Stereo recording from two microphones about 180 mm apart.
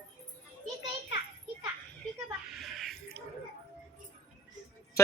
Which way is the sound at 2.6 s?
Centre (ahead or behind).